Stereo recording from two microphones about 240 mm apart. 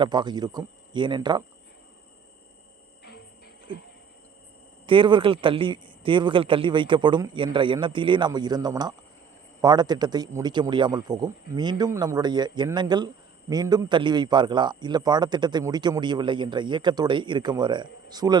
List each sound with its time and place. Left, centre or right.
0.0 s a man's voice: centre
4.9 s a man's voice: centre